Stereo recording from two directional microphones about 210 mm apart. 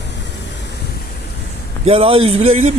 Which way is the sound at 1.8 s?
25° right (ahead or behind).